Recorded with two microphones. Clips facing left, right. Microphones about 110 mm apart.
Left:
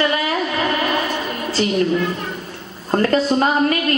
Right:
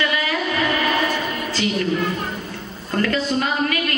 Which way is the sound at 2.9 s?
35° left (ahead or behind).